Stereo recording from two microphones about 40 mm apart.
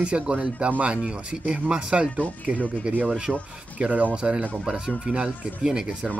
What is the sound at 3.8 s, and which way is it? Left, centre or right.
Speech, right.